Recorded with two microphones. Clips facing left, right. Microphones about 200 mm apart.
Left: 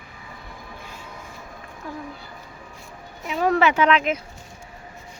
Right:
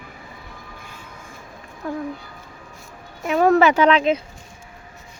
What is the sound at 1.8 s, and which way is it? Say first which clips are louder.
Speech: right 7 dB; 55° right (ahead or behind).